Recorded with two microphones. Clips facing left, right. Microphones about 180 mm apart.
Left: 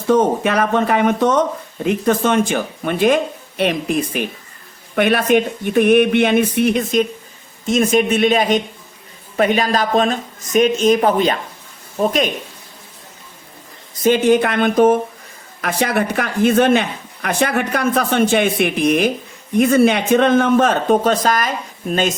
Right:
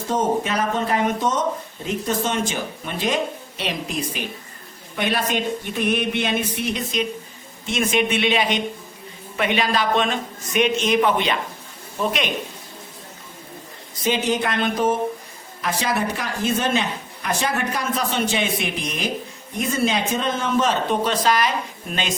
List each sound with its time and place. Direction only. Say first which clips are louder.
0.1 s a man's voice: left 7 dB; 65° left (ahead or behind); by 12.3 s 45° left (ahead or behind)
14.0 s a man's voice: left 8 dB; 50° left (ahead or behind)